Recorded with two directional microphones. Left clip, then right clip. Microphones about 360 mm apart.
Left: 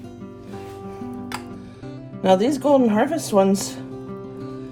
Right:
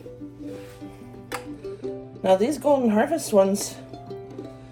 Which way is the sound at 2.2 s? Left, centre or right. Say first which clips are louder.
Left 3 dB; left.